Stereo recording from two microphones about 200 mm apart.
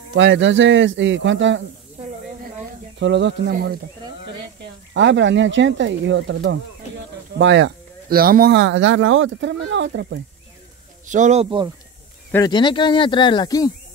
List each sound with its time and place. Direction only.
0.1 s speech: 65° right (ahead or behind)
3.0 s speech: 60° right (ahead or behind)
4.9 s speech: 65° right (ahead or behind)
11.1 s speech: 35° right (ahead or behind)
12.3 s speech: 15° left (ahead or behind)